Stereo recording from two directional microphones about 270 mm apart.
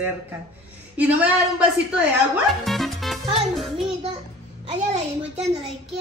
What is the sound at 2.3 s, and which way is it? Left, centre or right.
A child's voice, centre.